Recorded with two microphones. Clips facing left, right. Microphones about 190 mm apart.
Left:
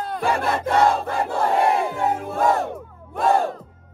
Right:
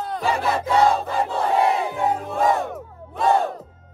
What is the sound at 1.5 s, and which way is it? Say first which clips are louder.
Crowd: even; 55° left (ahead or behind).